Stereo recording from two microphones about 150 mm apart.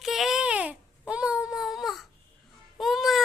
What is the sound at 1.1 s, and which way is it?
Babbling, 5° right (ahead or behind).